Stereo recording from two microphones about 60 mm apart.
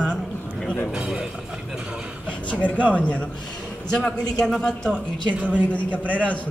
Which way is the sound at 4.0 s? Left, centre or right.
Centre.